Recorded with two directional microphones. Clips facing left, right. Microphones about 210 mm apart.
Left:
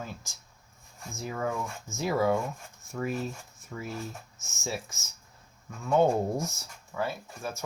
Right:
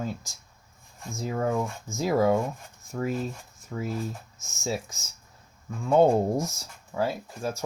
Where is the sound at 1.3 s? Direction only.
35° right (ahead or behind).